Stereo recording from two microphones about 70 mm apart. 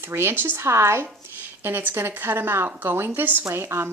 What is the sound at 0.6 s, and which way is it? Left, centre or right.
A woman's voice, right.